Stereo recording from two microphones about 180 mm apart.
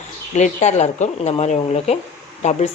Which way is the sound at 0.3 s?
40° left (ahead or behind).